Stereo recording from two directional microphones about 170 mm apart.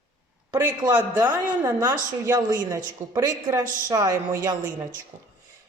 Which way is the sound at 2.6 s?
20° right (ahead or behind).